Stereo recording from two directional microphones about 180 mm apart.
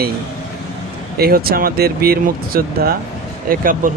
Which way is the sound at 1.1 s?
55° right (ahead or behind).